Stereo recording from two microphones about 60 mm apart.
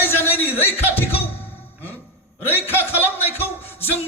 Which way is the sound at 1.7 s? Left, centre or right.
Left.